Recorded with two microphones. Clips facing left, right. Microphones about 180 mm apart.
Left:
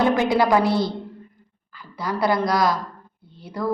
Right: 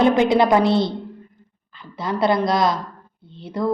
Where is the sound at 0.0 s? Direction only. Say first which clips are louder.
Right 3 dB; 20° right (ahead or behind).